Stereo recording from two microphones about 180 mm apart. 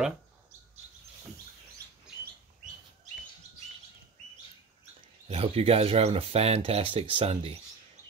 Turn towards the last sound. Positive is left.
turn(degrees=-30)  # may be behind; listen again after turning